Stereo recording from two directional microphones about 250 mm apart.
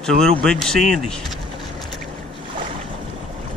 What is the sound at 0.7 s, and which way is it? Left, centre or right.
Speech, left.